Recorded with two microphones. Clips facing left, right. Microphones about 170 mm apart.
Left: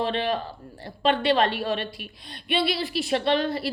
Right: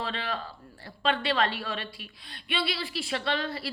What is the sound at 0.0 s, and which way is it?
A woman's voice, 20° left (ahead or behind).